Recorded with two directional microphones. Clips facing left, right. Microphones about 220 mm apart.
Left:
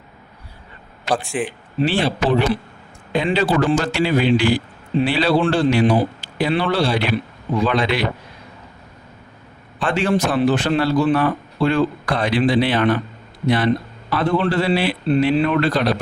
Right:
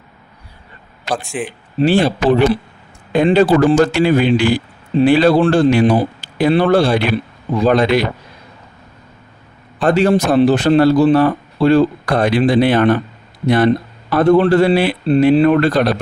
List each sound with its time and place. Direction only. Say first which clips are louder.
1.3 s speech: right 1 dB; centre (ahead or behind)
1.8 s a man's voice: right 6 dB; 45° right (ahead or behind)
9.8 s a man's voice: right 6 dB; 40° right (ahead or behind)
14.1 s a man's voice: right 8 dB; 45° right (ahead or behind)